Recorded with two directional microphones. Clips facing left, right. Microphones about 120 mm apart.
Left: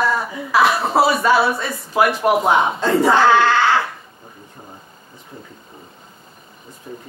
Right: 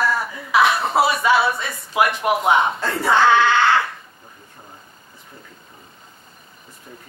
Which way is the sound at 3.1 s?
Centre (ahead or behind).